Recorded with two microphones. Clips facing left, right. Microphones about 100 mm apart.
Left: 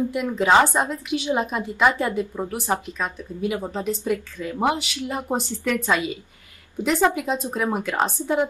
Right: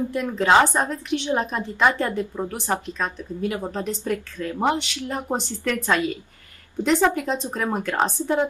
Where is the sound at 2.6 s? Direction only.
10° left (ahead or behind).